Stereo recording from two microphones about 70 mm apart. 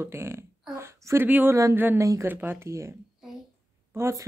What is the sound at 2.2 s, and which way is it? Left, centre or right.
Speech, right.